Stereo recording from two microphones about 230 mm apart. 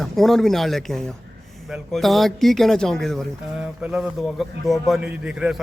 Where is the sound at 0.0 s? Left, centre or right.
Centre.